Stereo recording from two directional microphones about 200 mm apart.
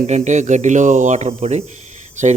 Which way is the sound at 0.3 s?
35° right (ahead or behind).